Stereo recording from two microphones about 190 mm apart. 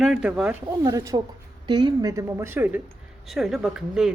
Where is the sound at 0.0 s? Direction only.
5° right (ahead or behind).